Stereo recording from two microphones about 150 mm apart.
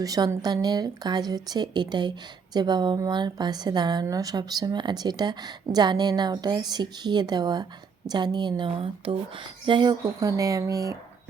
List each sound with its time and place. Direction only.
0.0 s a woman's voice: 25° right (ahead or behind)